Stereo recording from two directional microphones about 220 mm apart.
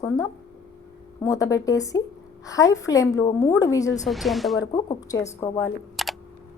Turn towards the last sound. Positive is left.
turn(degrees=0)  # may be behind; listen again after turning